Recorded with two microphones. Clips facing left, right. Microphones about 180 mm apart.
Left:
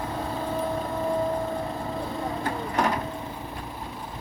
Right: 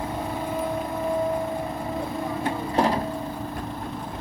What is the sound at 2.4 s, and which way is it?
Printer, 30° right (ahead or behind).